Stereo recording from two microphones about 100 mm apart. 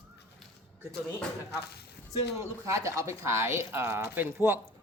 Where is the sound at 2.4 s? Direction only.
30° right (ahead or behind).